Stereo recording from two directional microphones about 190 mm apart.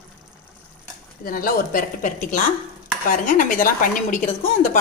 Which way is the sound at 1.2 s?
50° left (ahead or behind).